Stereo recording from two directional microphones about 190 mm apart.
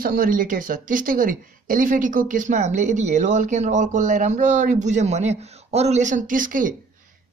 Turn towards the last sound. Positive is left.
turn(degrees=-45)  # may be behind; listen again after turning